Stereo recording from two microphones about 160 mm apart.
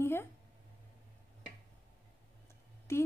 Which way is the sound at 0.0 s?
15° left (ahead or behind).